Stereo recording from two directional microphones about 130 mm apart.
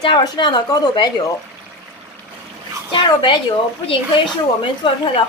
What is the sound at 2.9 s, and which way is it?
Speech, 40° left (ahead or behind).